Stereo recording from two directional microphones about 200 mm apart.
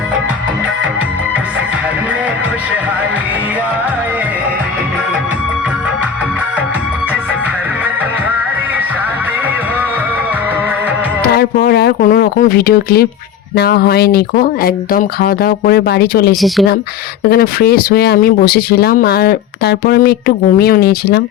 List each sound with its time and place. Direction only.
11.3 s speech: 50° left (ahead or behind)
16.3 s speech: centre (ahead or behind)
17.2 s speech: 50° left (ahead or behind)